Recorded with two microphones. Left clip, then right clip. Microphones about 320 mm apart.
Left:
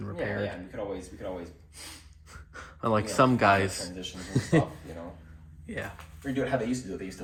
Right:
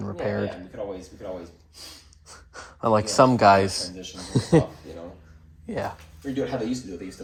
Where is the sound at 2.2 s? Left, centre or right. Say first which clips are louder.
Right 3 dB; centre.